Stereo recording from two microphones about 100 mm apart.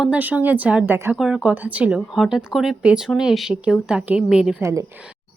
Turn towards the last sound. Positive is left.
turn(degrees=-35)  # may be behind; listen again after turning